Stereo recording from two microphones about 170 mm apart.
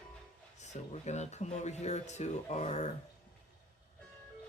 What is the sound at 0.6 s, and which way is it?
Speech, 40° left (ahead or behind).